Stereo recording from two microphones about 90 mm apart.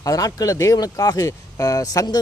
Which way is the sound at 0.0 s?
40° left (ahead or behind).